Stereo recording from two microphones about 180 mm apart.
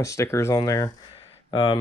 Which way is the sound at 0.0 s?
15° left (ahead or behind).